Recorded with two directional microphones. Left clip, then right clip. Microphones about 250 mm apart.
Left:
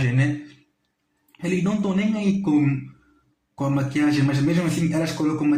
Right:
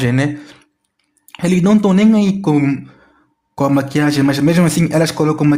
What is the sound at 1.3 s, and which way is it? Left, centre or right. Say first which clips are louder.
Speech: right 10 dB; right.